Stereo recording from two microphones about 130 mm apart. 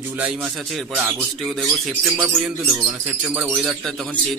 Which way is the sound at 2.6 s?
25° right (ahead or behind).